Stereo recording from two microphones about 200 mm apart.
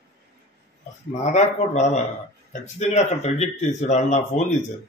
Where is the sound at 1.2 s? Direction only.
35° left (ahead or behind).